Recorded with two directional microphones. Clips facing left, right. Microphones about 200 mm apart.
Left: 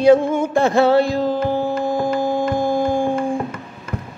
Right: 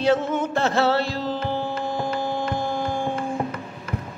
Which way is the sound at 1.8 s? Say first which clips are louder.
Left 7 dB; 45° left (ahead or behind).